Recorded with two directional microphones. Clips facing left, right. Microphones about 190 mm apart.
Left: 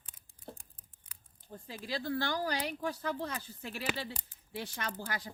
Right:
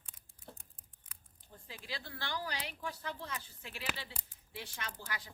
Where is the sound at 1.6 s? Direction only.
40° left (ahead or behind).